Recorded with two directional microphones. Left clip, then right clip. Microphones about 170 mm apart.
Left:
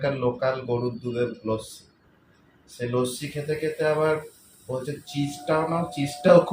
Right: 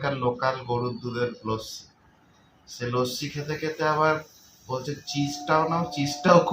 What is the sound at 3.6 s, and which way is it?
Speech, 5° right (ahead or behind).